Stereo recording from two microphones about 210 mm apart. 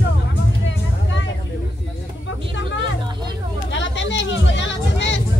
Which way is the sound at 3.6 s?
60° left (ahead or behind).